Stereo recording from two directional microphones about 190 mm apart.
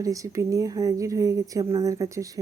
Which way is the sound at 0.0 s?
15° right (ahead or behind).